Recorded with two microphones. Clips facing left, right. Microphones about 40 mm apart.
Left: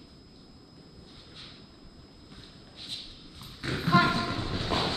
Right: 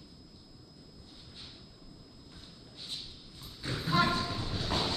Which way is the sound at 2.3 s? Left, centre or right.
Left.